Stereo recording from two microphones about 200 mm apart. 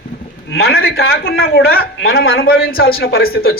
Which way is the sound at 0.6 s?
50° left (ahead or behind).